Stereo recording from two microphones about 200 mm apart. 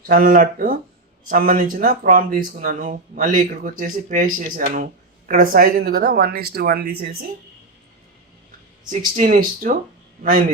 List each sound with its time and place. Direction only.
0.1 s speech: 45° right (ahead or behind)
9.1 s speech: 40° right (ahead or behind)